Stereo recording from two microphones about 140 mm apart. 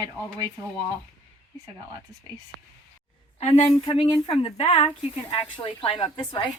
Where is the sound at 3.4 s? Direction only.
50° left (ahead or behind).